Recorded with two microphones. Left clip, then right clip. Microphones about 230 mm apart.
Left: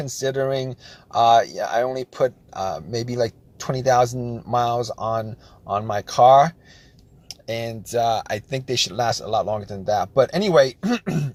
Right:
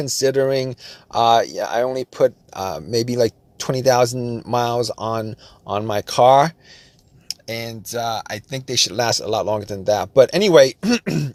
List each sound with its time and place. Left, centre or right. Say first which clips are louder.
0.0 s speech: right 5 dB; right
7.3 s speech: even; centre
8.7 s speech: right 3 dB; right